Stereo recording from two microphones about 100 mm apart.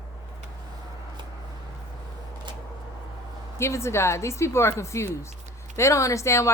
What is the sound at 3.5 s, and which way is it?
Speech, 30° left (ahead or behind).